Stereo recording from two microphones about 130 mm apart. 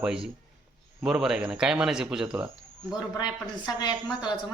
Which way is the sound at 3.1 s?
30° left (ahead or behind).